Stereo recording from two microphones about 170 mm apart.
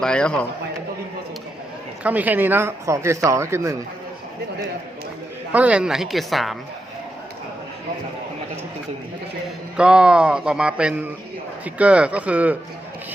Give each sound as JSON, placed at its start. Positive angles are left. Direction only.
{"t": 0.0, "sound": "speech", "side_deg": 5}
{"t": 2.0, "sound": "speech", "side_deg": -10}
{"t": 5.5, "sound": "speech", "side_deg": -10}
{"t": 9.7, "sound": "speech", "side_deg": -5}